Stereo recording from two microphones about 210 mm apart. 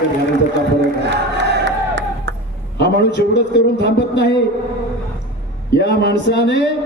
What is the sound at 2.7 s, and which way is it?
A man's voice, 55° left (ahead or behind).